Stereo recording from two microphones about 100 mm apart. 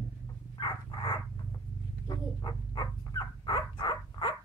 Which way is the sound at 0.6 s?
50° left (ahead or behind).